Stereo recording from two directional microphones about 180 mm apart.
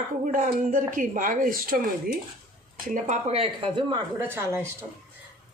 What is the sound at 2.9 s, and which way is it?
Speech, 40° right (ahead or behind).